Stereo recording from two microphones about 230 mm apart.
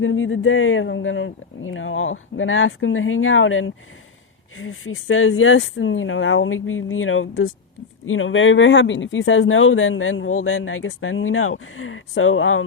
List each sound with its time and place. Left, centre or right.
0.0 s speech: left